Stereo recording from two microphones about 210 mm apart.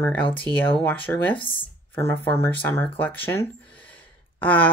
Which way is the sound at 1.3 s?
25° left (ahead or behind).